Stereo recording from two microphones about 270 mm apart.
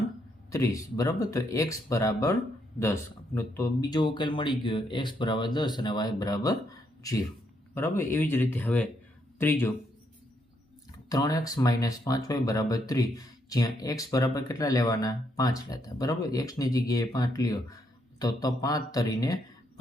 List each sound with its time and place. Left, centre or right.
0.5 s speech: centre
3.3 s speech: centre
7.8 s speech: centre
11.1 s speech: centre